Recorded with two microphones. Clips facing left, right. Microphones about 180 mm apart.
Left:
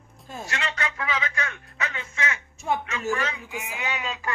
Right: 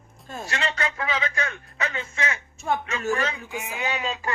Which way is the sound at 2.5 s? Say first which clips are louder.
Even; 15° left (ahead or behind).